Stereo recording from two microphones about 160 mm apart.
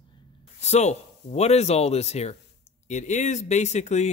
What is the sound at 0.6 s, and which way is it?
Speech, 45° left (ahead or behind).